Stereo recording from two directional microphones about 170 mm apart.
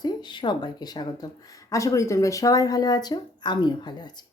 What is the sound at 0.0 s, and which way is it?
Speech, 25° left (ahead or behind).